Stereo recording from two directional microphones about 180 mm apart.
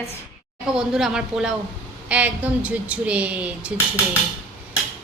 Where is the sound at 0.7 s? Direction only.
5° right (ahead or behind).